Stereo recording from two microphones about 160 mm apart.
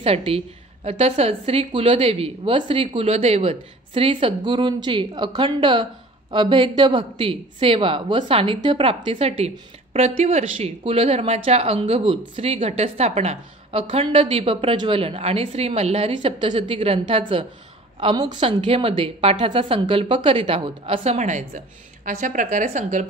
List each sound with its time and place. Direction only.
0.0 s a woman's voice: 35° right (ahead or behind)